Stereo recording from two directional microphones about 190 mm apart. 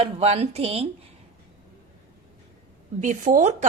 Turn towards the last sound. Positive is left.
turn(degrees=-40)  # may be behind; listen again after turning